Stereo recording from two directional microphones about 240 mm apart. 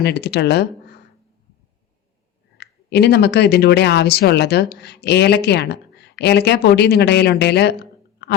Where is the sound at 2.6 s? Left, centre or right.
Left.